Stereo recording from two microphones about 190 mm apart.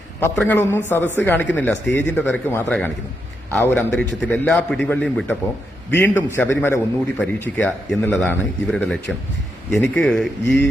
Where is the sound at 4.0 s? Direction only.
5° left (ahead or behind).